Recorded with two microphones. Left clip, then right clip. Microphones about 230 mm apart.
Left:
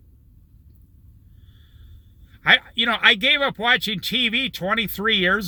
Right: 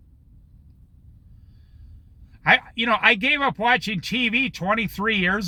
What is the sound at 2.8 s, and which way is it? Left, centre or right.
Speech, centre.